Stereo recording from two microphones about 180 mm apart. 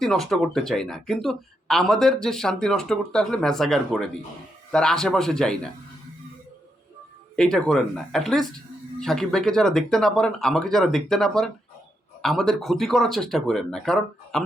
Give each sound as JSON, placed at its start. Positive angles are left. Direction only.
{"t": 0.0, "sound": "speech", "side_deg": 0}
{"t": 7.3, "sound": "speech", "side_deg": 5}